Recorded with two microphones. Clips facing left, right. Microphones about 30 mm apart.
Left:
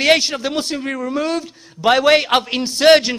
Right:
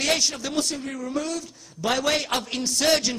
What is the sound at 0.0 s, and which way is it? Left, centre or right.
A man's voice, left.